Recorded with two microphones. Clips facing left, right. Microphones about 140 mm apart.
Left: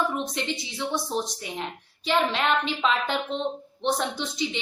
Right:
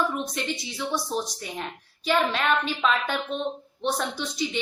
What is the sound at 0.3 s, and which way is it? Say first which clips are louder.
A woman's voice: even; 20° left (ahead or behind).